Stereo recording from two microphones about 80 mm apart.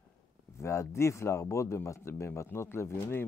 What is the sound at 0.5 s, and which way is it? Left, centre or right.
A man's voice, left.